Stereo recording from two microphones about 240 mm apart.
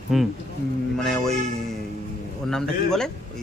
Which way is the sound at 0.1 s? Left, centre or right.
Centre.